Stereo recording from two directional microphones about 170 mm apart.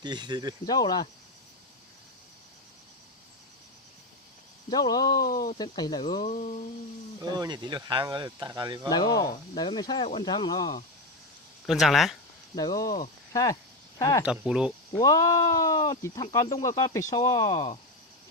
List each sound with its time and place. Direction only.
0.0 s speech: 25° right (ahead or behind)
0.7 s speech: 25° left (ahead or behind)
4.7 s speech: 25° left (ahead or behind)
5.1 s speech: 55° left (ahead or behind)
5.5 s speech: 25° left (ahead or behind)
6.2 s a sound: 45° left (ahead or behind)
7.2 s speech: 25° right (ahead or behind)
8.9 s speech: 25° left (ahead or behind)
11.6 s speech: centre (ahead or behind)
12.5 s speech: 25° left (ahead or behind)
14.3 s speech: 5° right (ahead or behind)
14.9 s speech: 20° left (ahead or behind)
17.5 s speech: 35° left (ahead or behind)